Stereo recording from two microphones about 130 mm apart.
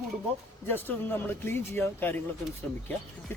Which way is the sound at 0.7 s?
15° left (ahead or behind).